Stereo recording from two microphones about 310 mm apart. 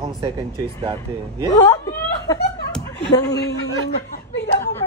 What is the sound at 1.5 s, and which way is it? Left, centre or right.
Chuckle, centre.